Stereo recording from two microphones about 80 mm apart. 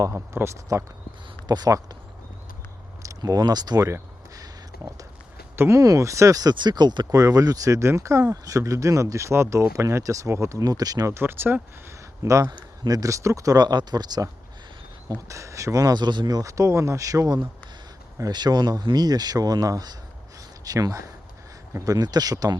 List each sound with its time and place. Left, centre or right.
0.1 s speech: right
1.5 s speech: right
3.0 s speech: right
3.8 s a sound: right
5.5 s speech: right
7.1 s speech: right
11.1 s speech: right
12.2 s speech: right
12.5 s speech: right
15.3 s speech: right
18.3 s speech: right
21.9 s speech: right